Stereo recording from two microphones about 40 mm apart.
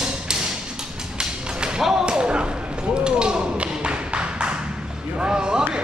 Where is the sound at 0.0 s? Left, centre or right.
Centre.